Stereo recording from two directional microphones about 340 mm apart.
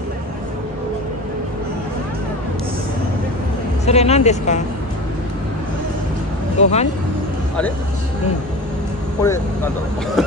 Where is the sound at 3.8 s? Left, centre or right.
Centre.